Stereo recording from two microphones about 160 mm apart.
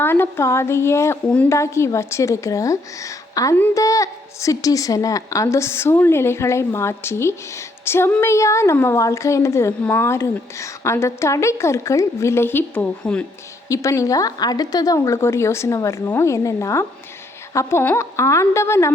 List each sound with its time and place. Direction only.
0.0 s a woman's voice: 15° left (ahead or behind)
13.7 s a woman's voice: 20° left (ahead or behind)